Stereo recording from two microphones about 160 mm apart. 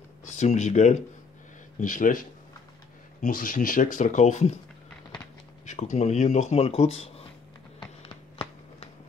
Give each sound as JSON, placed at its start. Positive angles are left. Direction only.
{"t": 0.2, "sound": "speech", "side_deg": 50}
{"t": 5.7, "sound": "speech", "side_deg": 45}
{"t": 7.8, "sound": "a sound", "side_deg": 35}